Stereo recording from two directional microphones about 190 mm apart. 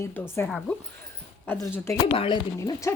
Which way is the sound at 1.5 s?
10° left (ahead or behind).